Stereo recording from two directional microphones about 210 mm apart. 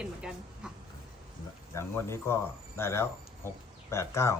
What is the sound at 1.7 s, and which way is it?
Speech, 10° left (ahead or behind).